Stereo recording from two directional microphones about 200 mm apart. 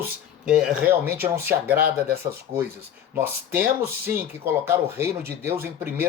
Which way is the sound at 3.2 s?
10° right (ahead or behind).